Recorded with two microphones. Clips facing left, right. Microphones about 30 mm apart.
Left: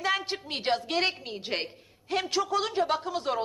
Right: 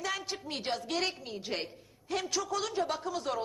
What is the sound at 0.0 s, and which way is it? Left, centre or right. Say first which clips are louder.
A woman's voice: left 7 dB; left.